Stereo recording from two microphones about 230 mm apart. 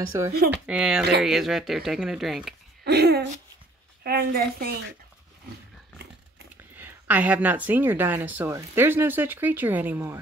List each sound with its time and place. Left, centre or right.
0.5 s speech: centre
2.8 s a woman's voice: right
6.8 s a woman's voice: centre